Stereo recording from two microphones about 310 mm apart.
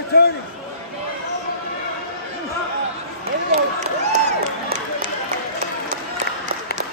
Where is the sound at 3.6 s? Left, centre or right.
Right.